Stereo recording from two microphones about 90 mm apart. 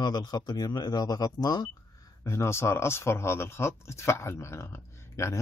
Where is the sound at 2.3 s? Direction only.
30° left (ahead or behind).